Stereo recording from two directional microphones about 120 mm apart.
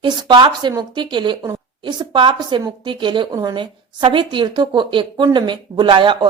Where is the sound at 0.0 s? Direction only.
40° right (ahead or behind).